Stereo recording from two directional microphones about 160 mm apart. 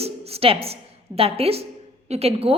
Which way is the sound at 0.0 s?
40° right (ahead or behind).